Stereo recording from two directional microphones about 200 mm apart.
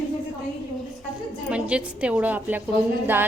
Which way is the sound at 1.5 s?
5° right (ahead or behind).